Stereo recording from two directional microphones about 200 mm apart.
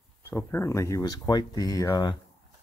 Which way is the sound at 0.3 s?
15° left (ahead or behind).